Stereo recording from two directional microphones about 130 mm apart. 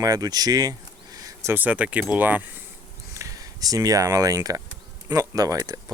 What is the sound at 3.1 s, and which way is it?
Speech, 25° right (ahead or behind).